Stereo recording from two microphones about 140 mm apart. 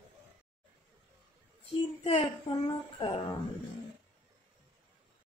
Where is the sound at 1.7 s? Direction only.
40° left (ahead or behind).